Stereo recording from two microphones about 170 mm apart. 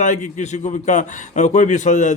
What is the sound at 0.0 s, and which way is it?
A man's voice, 45° left (ahead or behind).